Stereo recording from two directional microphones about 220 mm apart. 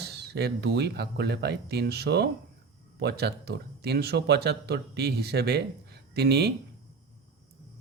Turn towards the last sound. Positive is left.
turn(degrees=-50)  # may be behind; listen again after turning